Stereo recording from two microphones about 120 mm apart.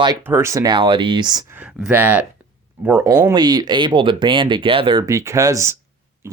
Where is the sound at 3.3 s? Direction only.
35° right (ahead or behind).